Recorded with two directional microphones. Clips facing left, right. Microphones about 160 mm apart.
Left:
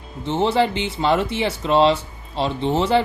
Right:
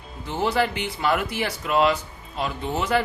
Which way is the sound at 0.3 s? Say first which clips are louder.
Left 5 dB; 25° left (ahead or behind).